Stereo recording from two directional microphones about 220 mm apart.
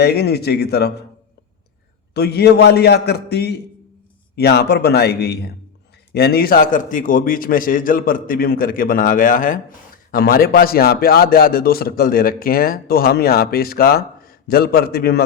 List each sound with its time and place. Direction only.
0.0 s a man's voice: 45° left (ahead or behind)
2.1 s a man's voice: 45° left (ahead or behind)